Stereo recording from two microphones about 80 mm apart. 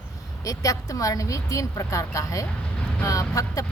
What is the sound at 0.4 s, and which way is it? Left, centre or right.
Speech, left.